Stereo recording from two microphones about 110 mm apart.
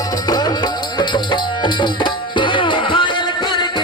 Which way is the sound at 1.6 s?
45° left (ahead or behind).